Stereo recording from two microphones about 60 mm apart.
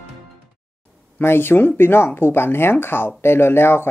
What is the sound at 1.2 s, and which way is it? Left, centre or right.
Speech, left.